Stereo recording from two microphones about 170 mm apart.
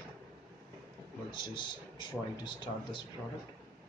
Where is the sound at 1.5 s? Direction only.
30° left (ahead or behind).